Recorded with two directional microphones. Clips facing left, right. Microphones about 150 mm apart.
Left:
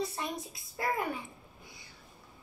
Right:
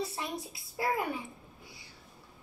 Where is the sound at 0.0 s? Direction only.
5° right (ahead or behind).